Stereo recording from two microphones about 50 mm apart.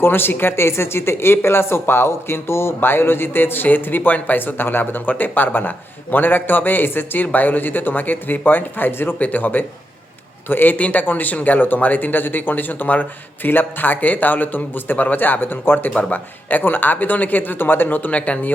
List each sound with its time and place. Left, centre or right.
0.0 s speech: left
9.1 s speech: left